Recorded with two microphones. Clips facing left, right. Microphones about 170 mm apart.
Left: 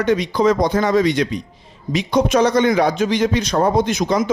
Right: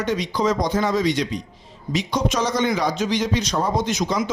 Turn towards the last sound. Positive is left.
turn(degrees=55)  # may be behind; listen again after turning